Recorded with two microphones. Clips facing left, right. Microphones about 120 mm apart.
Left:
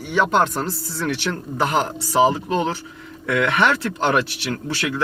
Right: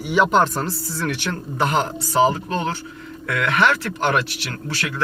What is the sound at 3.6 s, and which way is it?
Speech, 20° left (ahead or behind).